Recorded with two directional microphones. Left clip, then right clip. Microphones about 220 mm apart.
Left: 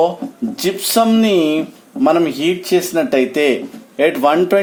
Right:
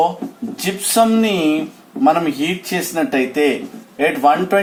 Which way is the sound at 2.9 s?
50° left (ahead or behind).